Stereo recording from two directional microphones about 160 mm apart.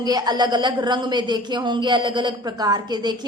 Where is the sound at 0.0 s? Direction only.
25° right (ahead or behind).